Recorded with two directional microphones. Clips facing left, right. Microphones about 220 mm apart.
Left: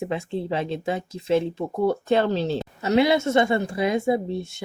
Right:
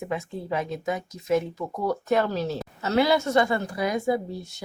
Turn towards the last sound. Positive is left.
turn(degrees=25)  # may be behind; listen again after turning